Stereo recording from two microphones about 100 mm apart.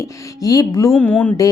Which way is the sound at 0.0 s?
35° left (ahead or behind).